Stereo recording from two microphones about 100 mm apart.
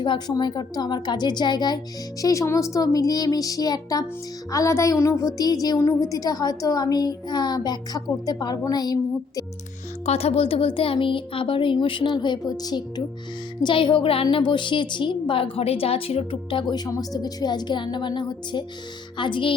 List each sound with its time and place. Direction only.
0.0 s a woman's voice: 50° left (ahead or behind)
2.2 s speech: 35° left (ahead or behind)
10.1 s speech: 90° left; by 14.3 s 65° left (ahead or behind)
14.3 s a woman's voice: 50° left (ahead or behind)